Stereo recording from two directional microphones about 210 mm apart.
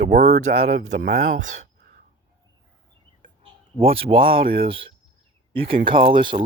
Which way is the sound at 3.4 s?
25° right (ahead or behind).